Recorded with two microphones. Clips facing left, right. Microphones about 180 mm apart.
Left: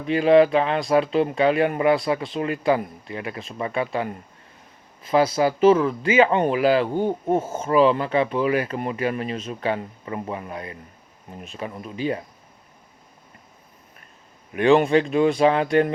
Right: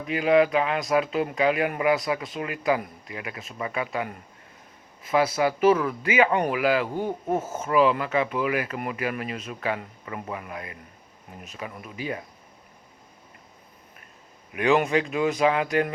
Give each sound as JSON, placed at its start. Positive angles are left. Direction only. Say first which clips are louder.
{"t": 0.0, "sound": "speech", "louder": "left 5 dB", "side_deg": 30}
{"t": 14.5, "sound": "speech", "louder": "left 5 dB", "side_deg": 30}